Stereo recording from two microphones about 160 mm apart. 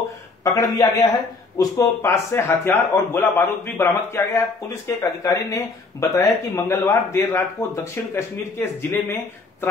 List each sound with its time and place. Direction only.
0.4 s a man's voice: 20° left (ahead or behind)